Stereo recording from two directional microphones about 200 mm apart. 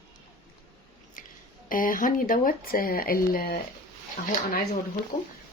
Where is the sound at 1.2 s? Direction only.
45° left (ahead or behind).